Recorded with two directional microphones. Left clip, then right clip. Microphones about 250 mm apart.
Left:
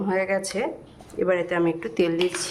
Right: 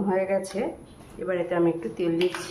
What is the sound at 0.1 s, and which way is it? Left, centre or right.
Speech, left.